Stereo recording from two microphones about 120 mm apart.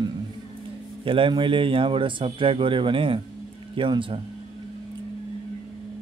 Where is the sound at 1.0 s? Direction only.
45° right (ahead or behind).